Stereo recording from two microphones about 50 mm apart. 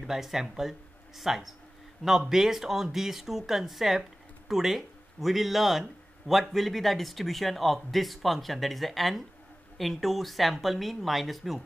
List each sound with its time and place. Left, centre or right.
0.0 s speech: centre